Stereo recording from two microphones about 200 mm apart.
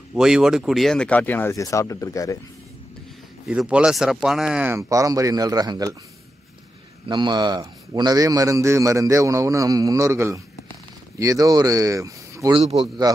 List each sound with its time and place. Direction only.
0.1 s speech: 5° right (ahead or behind); by 2.3 s 15° left (ahead or behind)
3.4 s a man's voice: 5° right (ahead or behind)
7.1 s a man's voice: 20° right (ahead or behind)
12.5 s speech: 25° right (ahead or behind)